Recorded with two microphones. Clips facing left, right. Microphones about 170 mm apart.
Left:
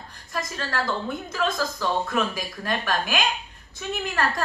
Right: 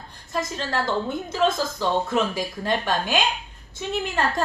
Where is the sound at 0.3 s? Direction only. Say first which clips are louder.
Right 3 dB; 25° right (ahead or behind).